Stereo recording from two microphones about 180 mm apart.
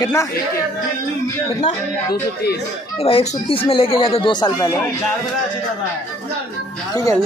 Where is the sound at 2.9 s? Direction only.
30° left (ahead or behind).